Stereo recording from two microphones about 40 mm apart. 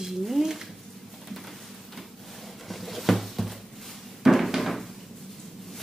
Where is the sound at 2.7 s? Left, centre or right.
Centre.